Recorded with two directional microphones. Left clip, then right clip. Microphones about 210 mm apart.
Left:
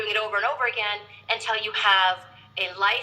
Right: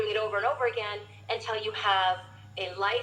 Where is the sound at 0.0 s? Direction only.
25° left (ahead or behind).